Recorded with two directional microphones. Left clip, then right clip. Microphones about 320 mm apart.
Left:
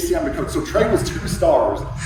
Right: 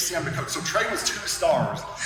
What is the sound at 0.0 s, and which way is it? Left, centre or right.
Speech, centre.